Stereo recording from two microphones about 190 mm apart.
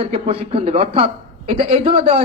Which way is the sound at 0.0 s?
30° right (ahead or behind).